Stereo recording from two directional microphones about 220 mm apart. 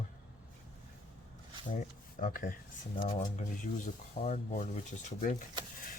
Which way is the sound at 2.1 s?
40° left (ahead or behind).